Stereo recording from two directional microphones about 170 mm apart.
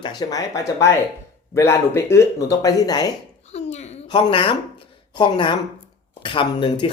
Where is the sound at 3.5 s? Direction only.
40° left (ahead or behind).